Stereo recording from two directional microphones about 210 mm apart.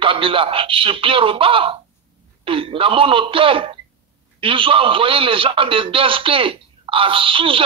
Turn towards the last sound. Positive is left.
turn(degrees=-25)  # may be behind; listen again after turning